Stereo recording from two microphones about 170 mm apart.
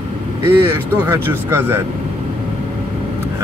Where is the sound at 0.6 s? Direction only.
15° right (ahead or behind).